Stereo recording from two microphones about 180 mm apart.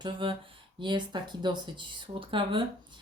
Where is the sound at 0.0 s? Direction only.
25° right (ahead or behind).